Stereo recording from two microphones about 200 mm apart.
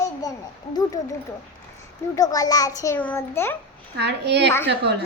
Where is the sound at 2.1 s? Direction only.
20° left (ahead or behind).